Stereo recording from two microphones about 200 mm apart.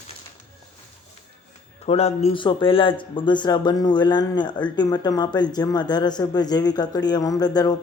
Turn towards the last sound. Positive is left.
turn(degrees=20)  # may be behind; listen again after turning